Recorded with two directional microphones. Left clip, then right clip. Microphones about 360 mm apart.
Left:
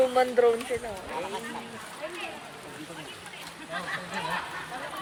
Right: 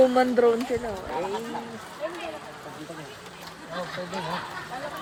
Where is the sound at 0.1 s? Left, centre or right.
Right.